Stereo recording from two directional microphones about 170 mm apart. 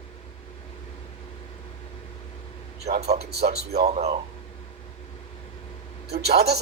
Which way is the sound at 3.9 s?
40° right (ahead or behind).